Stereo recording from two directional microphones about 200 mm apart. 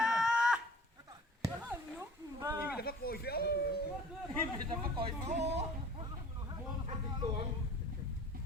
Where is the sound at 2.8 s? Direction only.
50° left (ahead or behind).